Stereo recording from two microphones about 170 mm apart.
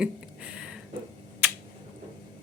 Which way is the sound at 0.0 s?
5° right (ahead or behind).